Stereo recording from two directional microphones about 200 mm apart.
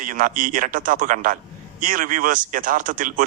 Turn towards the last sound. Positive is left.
turn(degrees=-40)  # may be behind; listen again after turning